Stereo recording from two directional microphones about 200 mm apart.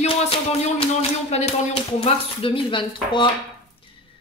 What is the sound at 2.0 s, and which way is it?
Speech, 30° left (ahead or behind).